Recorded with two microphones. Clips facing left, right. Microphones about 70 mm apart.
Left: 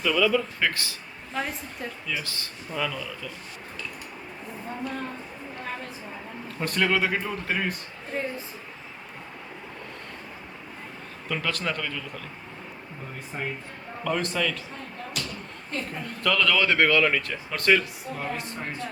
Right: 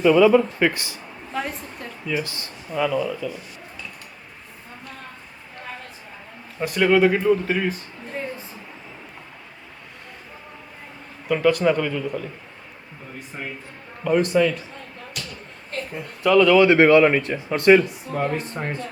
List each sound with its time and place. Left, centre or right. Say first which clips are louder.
0.0 s speech: right 9 dB; right
1.3 s speech: right 2 dB; centre
2.0 s a man's voice: right 10 dB; centre
6.6 s speech: right 7 dB; centre
11.3 s a man's voice: right 11 dB; centre
14.0 s a man's voice: right 8 dB; centre
16.0 s speech: right 9 dB; centre
18.3 s speech: right 6 dB; right